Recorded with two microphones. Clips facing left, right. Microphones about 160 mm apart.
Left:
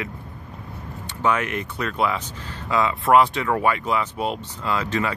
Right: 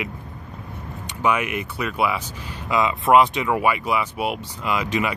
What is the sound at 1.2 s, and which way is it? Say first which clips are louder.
Speech: right 1 dB; 10° right (ahead or behind).